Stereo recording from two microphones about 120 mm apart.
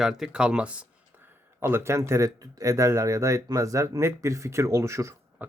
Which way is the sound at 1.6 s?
20° right (ahead or behind).